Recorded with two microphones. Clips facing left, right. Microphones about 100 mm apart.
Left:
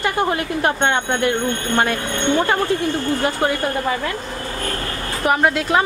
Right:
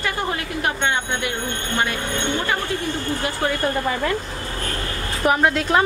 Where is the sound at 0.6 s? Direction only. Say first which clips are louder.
Left 3 dB; 50° left (ahead or behind).